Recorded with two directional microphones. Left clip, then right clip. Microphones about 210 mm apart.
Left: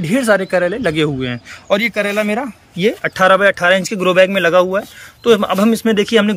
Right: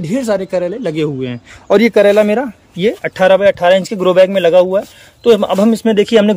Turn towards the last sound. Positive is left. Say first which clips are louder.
# right 3 dB
turn(degrees=-15)  # may be behind; listen again after turning